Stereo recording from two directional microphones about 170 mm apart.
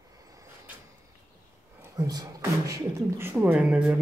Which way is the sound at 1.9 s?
20° right (ahead or behind).